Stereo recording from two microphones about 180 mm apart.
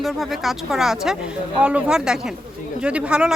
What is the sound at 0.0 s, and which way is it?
Speech, centre (ahead or behind).